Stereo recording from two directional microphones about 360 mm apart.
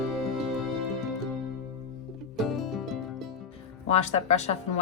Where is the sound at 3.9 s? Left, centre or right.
Centre.